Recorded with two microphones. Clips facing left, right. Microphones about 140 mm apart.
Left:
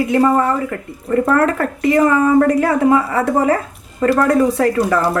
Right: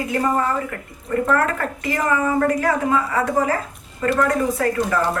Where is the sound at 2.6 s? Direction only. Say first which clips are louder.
Left 6 dB; 25° left (ahead or behind).